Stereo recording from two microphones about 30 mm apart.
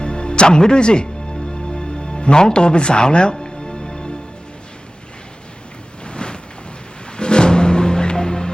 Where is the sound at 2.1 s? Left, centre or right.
Left.